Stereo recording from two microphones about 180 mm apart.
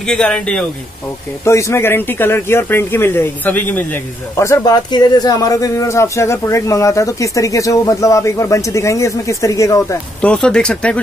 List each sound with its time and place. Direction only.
0.0 s speech: 5° left (ahead or behind)
10.2 s speech: 5° left (ahead or behind)